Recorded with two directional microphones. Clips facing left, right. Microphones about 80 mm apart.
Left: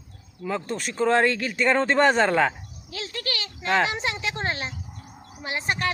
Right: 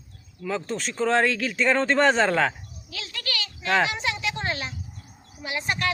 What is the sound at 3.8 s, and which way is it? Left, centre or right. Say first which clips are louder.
Speech: even; left.